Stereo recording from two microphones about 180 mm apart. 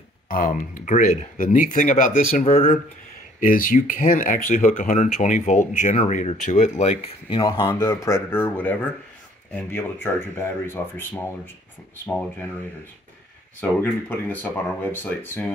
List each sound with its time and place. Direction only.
0.3 s speech: 50° left (ahead or behind); by 7.4 s 35° left (ahead or behind)
7.4 s speech: 20° left (ahead or behind)
13.6 s speech: 10° left (ahead or behind)